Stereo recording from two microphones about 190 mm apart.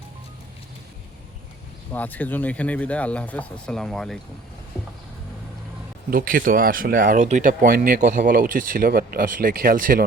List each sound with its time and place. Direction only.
1.9 s speech: 10° left (ahead or behind)
6.1 s speech: 50° right (ahead or behind)